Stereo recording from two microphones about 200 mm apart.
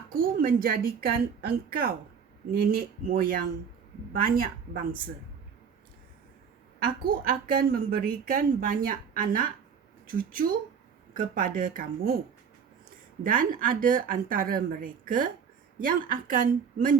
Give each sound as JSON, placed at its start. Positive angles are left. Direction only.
{"t": 0.1, "sound": "a woman's voice", "side_deg": -45}
{"t": 7.0, "sound": "a woman's voice", "side_deg": -45}
{"t": 13.2, "sound": "a woman's voice", "side_deg": -45}